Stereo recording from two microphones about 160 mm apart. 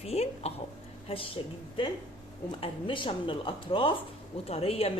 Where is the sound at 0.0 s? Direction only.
40° left (ahead or behind).